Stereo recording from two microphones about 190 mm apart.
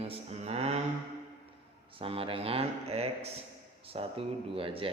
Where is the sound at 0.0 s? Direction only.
35° right (ahead or behind).